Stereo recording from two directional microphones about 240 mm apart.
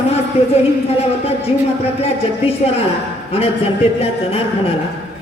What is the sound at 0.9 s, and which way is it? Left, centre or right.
A man's voice, left.